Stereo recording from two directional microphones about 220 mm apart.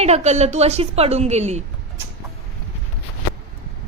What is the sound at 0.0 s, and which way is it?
A woman's voice, 30° right (ahead or behind).